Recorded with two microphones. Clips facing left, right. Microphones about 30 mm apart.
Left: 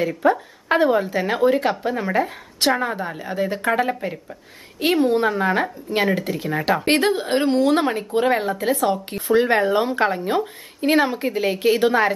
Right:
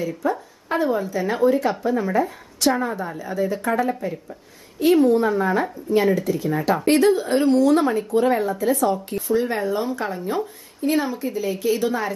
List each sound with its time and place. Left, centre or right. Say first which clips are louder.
0.2 s a woman's voice: left 5 dB; left
4.9 s speech: right 1 dB; left